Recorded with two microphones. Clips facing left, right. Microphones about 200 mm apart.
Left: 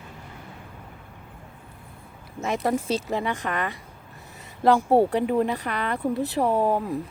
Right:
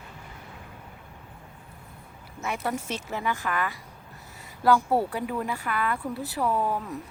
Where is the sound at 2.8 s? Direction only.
90° left.